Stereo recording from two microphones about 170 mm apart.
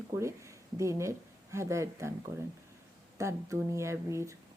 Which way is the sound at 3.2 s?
15° right (ahead or behind).